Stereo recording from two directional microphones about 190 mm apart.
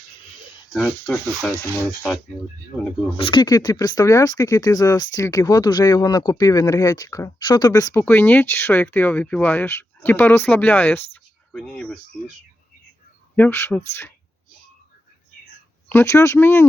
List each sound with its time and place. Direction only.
0.8 s speech: 5° left (ahead or behind)
3.2 s speech: 25° left (ahead or behind); by 11.9 s 5° left (ahead or behind)
13.3 s speech: 10° left (ahead or behind)
15.9 s speech: 15° left (ahead or behind)